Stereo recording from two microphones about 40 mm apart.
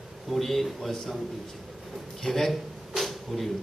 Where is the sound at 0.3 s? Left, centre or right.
Centre.